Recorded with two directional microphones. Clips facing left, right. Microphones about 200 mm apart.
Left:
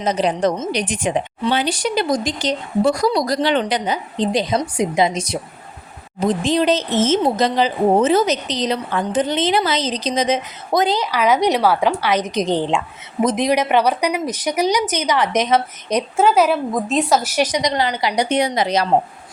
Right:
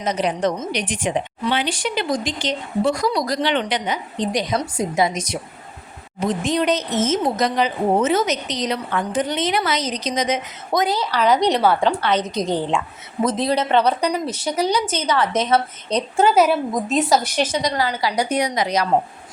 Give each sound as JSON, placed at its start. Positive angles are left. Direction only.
{"t": 0.0, "sound": "a woman's voice", "side_deg": 30}
{"t": 10.9, "sound": "speech", "side_deg": 15}
{"t": 16.2, "sound": "speech", "side_deg": 0}